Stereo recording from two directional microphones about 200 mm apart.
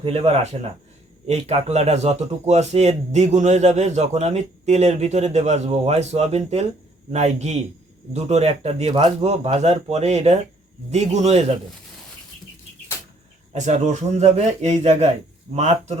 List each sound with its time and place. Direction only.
0.0 s a man's voice: 30° right (ahead or behind)
13.5 s a man's voice: 35° right (ahead or behind)